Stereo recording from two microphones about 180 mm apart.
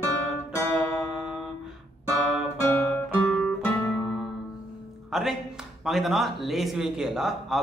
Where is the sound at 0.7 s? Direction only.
Centre (ahead or behind).